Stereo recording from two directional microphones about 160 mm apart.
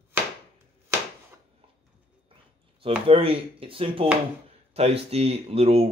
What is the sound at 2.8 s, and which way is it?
Speech, 35° right (ahead or behind).